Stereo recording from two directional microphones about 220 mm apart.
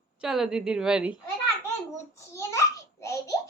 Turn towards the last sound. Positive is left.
turn(degrees=15)  # may be behind; listen again after turning